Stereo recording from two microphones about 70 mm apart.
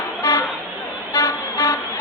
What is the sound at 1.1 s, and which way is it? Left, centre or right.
Vehicle, left.